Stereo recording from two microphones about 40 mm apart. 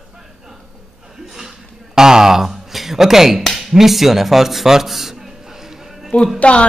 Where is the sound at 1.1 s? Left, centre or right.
Centre.